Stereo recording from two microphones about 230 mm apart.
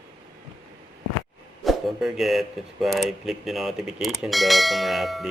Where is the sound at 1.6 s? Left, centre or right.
Centre.